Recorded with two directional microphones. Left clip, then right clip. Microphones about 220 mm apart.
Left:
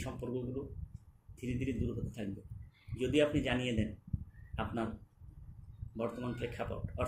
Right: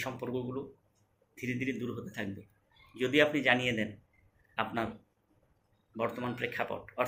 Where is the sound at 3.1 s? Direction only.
5° left (ahead or behind).